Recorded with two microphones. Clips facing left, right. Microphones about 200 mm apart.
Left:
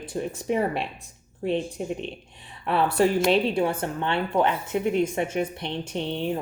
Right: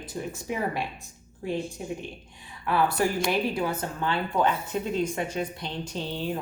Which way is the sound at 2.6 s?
25° left (ahead or behind).